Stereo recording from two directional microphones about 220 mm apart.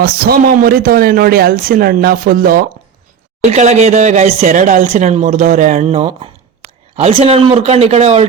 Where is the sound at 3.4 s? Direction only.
30° right (ahead or behind).